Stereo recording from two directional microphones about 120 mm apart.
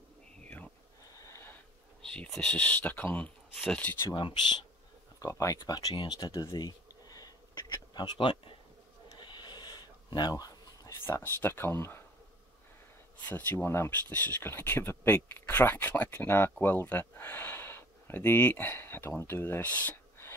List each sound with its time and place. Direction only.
0.4 s whispering: 10° left (ahead or behind)
1.1 s a sound: 25° left (ahead or behind)
2.0 s speech: 5° left (ahead or behind)
5.2 s speech: 25° left (ahead or behind)
6.0 s a sound: 35° left (ahead or behind)
11.4 s speech: 20° left (ahead or behind)
13.2 s speech: 15° left (ahead or behind)